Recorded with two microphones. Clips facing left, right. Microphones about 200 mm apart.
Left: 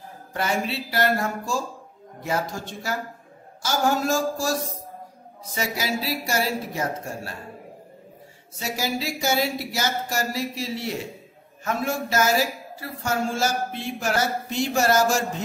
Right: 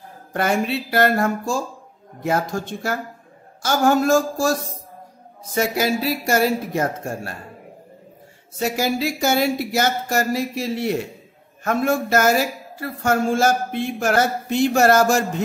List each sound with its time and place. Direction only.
0.3 s speech: 55° right (ahead or behind)
8.5 s speech: 55° right (ahead or behind)